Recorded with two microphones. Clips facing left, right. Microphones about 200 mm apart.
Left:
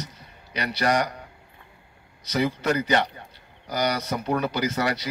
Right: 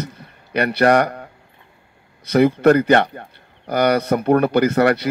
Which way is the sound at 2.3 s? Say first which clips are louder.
Right 11 dB; 55° right (ahead or behind).